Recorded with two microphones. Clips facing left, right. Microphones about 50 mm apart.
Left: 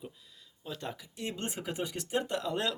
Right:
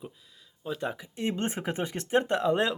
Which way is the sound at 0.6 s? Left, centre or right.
Centre.